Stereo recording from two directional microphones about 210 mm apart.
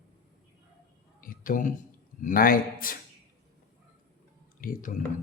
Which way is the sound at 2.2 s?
40° left (ahead or behind).